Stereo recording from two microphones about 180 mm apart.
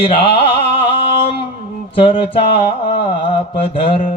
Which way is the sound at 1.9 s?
30° left (ahead or behind).